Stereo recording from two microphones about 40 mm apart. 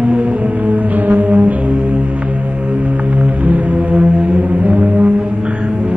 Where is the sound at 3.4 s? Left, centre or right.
Right.